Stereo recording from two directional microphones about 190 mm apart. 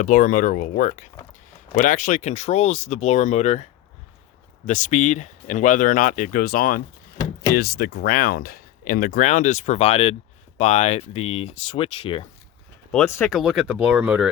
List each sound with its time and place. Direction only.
0.0 s speech: 45° left (ahead or behind)
12.9 s speech: 10° left (ahead or behind)
13.3 s speech: centre (ahead or behind)